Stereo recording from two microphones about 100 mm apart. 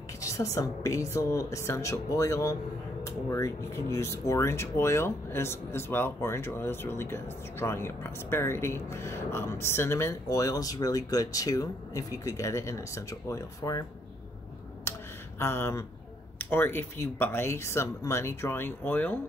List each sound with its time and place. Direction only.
0.2 s a woman's voice: 30° left (ahead or behind)
14.9 s a sound: 25° left (ahead or behind)
16.3 s speech: 20° left (ahead or behind)